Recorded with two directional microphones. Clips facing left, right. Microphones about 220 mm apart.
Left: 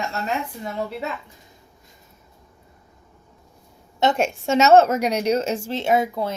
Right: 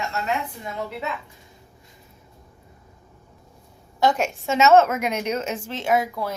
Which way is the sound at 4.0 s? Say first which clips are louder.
Left 1 dB; 25° left (ahead or behind).